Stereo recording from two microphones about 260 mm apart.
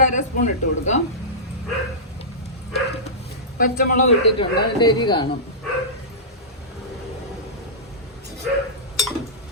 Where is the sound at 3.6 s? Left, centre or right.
Left.